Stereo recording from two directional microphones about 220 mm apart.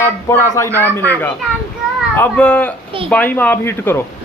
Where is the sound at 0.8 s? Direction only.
10° left (ahead or behind).